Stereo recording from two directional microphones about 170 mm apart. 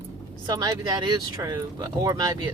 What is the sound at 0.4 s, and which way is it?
Speech, 20° right (ahead or behind).